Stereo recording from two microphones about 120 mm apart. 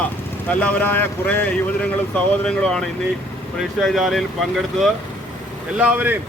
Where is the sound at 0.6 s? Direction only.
15° left (ahead or behind).